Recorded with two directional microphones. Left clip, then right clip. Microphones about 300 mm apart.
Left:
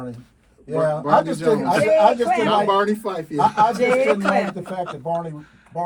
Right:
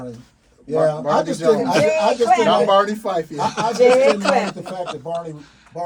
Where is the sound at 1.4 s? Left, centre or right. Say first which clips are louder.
Right 2 dB; centre.